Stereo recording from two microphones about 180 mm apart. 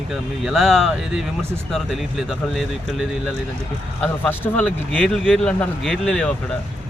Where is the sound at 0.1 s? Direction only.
Centre (ahead or behind).